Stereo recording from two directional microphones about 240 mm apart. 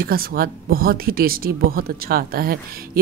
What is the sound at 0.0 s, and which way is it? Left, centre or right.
Speech, right.